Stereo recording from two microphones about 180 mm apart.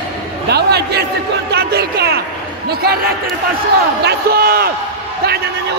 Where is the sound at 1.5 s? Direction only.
60° right (ahead or behind).